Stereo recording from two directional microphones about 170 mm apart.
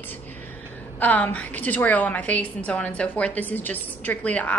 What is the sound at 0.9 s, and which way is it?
A woman's voice, 10° left (ahead or behind).